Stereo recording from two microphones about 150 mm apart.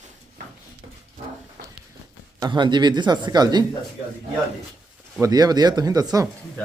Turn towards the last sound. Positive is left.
turn(degrees=-25)  # may be behind; listen again after turning